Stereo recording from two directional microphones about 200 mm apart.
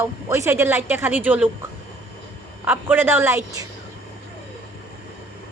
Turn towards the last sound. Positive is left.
turn(degrees=-15)  # may be behind; listen again after turning